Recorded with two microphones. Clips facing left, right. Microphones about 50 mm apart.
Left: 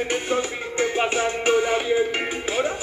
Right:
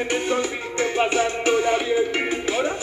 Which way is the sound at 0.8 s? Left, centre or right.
Left.